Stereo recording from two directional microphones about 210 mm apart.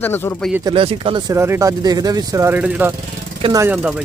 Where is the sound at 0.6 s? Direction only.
25° right (ahead or behind); by 2.9 s 5° right (ahead or behind).